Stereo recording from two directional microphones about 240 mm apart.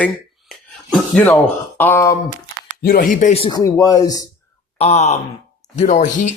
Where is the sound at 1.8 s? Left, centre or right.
Centre.